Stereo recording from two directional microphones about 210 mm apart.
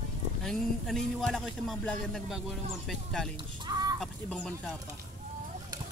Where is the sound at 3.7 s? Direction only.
20° right (ahead or behind).